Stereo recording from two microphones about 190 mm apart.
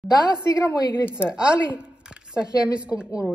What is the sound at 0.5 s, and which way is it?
Speech, 20° left (ahead or behind).